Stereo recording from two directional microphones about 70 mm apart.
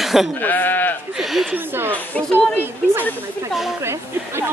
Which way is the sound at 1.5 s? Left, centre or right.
Right.